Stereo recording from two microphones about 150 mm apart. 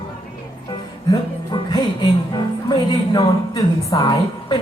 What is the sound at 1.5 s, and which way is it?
Music, 30° left (ahead or behind).